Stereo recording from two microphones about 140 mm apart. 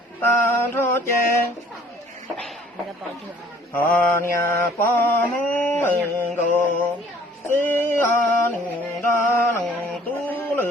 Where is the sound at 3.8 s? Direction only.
20° left (ahead or behind).